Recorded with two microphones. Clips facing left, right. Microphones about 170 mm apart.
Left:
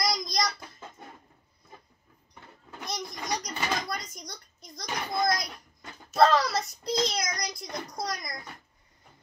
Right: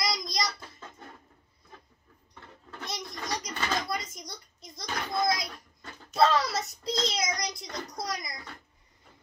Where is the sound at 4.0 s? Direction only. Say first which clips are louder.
Right 1 dB; 25° right (ahead or behind).